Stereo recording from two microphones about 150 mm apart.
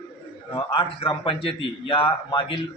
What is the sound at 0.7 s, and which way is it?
A man's voice, 35° left (ahead or behind).